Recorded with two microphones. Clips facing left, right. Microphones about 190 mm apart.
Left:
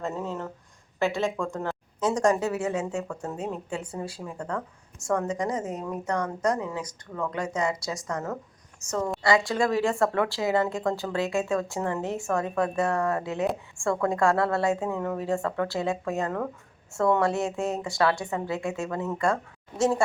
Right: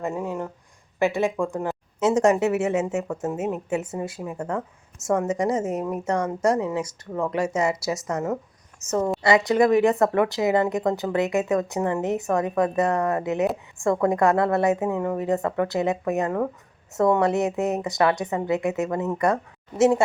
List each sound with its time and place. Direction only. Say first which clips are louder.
0.0 s speech: right 4 dB; 10° right (ahead or behind)